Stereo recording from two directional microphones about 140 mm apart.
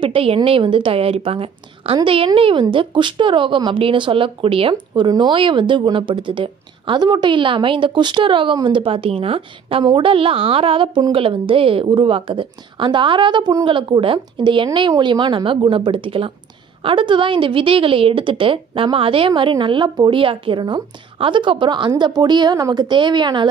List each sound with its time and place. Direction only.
0.0 s speech: 40° right (ahead or behind)